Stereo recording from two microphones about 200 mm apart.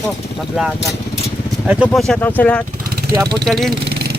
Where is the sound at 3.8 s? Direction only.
55° right (ahead or behind).